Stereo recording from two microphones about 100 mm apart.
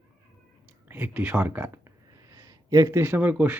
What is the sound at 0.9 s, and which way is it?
Speech, 20° right (ahead or behind).